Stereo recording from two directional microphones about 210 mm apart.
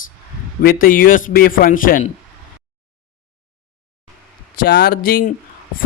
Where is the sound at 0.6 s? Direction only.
40° left (ahead or behind).